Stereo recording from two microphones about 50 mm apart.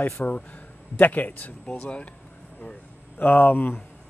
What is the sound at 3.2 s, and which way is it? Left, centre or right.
Speech, left.